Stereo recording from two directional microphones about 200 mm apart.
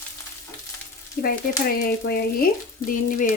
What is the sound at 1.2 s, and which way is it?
A woman's voice, 50° left (ahead or behind).